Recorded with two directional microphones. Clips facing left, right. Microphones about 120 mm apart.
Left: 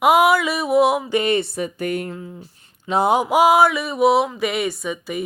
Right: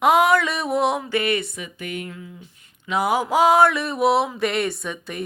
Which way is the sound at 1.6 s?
40° left (ahead or behind).